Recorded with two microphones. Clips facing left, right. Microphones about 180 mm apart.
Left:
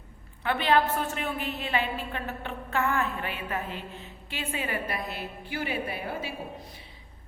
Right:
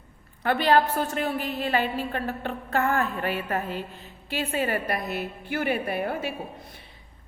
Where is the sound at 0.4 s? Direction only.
40° right (ahead or behind).